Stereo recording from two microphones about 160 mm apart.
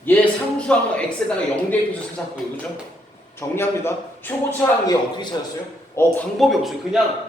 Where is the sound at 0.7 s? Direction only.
5° left (ahead or behind).